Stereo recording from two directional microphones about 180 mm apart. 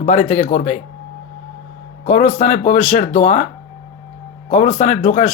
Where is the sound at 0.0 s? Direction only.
40° left (ahead or behind).